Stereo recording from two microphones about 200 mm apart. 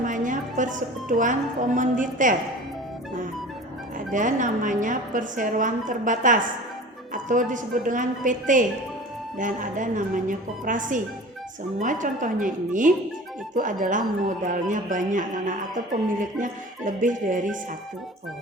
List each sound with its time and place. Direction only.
0.0 s speech: 40° right (ahead or behind)
4.1 s speech: 40° right (ahead or behind)